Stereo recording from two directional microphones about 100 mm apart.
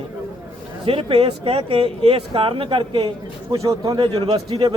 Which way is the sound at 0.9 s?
65° right (ahead or behind).